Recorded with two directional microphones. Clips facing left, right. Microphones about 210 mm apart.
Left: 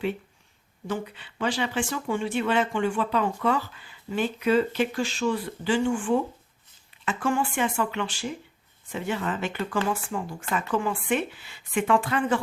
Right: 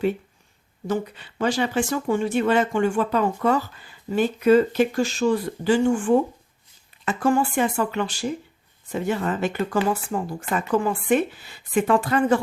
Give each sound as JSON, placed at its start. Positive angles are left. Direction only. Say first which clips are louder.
{"t": 0.9, "sound": "speech", "louder": "right 5 dB", "side_deg": -40}